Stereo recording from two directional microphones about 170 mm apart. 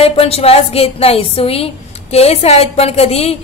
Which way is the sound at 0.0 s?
35° left (ahead or behind).